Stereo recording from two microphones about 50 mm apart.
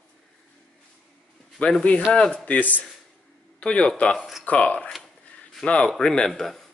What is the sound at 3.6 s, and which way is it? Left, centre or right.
Speech, left.